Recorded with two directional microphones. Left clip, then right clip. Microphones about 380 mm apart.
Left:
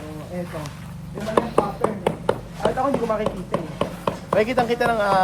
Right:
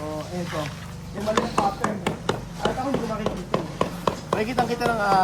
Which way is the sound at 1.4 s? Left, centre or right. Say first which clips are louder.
Left 4 dB; centre.